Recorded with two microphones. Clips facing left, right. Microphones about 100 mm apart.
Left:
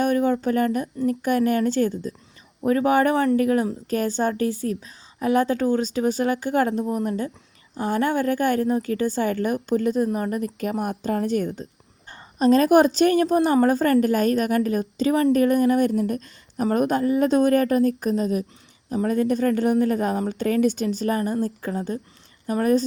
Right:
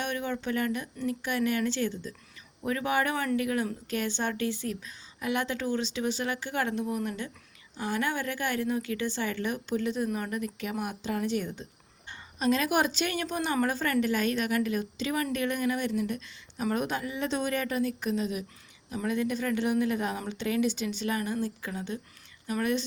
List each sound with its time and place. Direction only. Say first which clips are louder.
0.0 s a woman's voice: left 12 dB; 45° left (ahead or behind)